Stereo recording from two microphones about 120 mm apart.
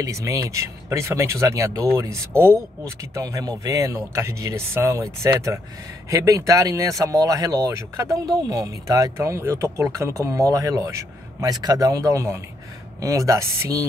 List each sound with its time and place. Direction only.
0.0 s speech: 25° right (ahead or behind)